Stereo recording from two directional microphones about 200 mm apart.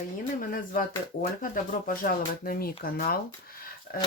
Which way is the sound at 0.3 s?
45° left (ahead or behind).